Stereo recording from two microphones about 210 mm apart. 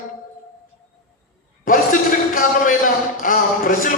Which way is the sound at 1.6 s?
40° left (ahead or behind).